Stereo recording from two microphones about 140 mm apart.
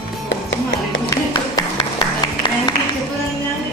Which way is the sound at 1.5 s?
30° left (ahead or behind).